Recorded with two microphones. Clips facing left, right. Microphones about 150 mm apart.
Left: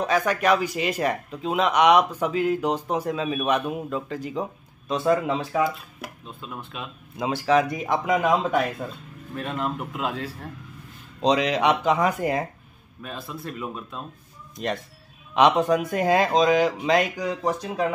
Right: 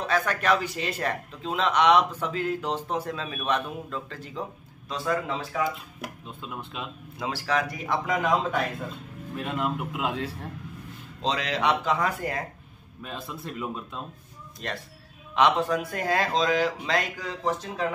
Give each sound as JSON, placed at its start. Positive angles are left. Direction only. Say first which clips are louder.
{"t": 0.0, "sound": "speech", "louder": "left 4 dB", "side_deg": 10}
{"t": 7.2, "sound": "a man's voice", "louder": "left 7 dB", "side_deg": 20}
{"t": 9.4, "sound": "a man's voice", "louder": "left 1 dB", "side_deg": -10}
{"t": 11.2, "sound": "a man's voice", "louder": "left 6 dB", "side_deg": 20}
{"t": 13.0, "sound": "speech", "louder": "left 2 dB", "side_deg": -20}
{"t": 14.6, "sound": "speech", "louder": "left 7 dB", "side_deg": 15}